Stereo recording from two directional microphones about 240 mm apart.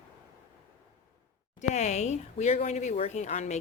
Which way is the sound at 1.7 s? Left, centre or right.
Left.